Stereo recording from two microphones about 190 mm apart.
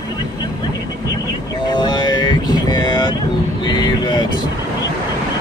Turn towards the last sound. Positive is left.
turn(degrees=25)  # may be behind; listen again after turning